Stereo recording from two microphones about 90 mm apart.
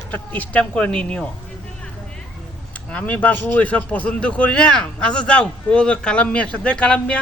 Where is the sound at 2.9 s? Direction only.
15° left (ahead or behind).